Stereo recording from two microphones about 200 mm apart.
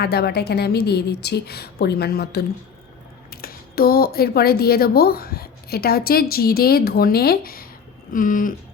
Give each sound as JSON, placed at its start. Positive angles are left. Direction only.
{"t": 0.0, "sound": "speech", "side_deg": 55}